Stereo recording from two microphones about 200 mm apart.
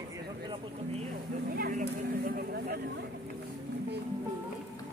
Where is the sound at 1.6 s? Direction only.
45° right (ahead or behind).